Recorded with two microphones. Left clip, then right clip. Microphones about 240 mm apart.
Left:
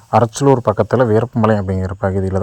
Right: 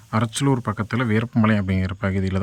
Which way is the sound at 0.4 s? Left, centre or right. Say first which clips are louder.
Left 11 dB; centre.